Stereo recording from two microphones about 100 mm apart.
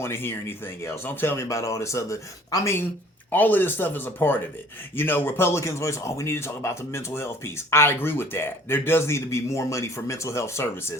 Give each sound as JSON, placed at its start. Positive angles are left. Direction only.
{"t": 0.0, "sound": "speech", "side_deg": 25}
{"t": 3.3, "sound": "speech", "side_deg": 20}